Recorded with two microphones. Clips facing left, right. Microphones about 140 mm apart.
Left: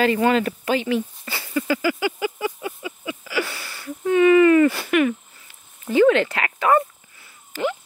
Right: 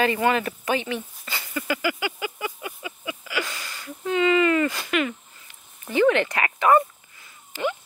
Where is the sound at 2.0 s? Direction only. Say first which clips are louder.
Left 6 dB; 35° left (ahead or behind).